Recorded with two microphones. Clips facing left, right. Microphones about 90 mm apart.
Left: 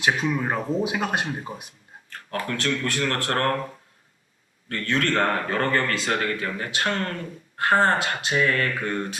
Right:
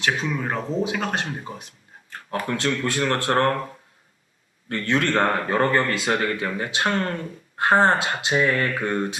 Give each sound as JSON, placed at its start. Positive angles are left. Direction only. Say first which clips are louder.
{"t": 0.0, "sound": "speech", "louder": "left 1 dB", "side_deg": 10}
{"t": 2.0, "sound": "speech", "louder": "right 2 dB", "side_deg": -20}
{"t": 4.7, "sound": "speech", "louder": "right 2 dB", "side_deg": -20}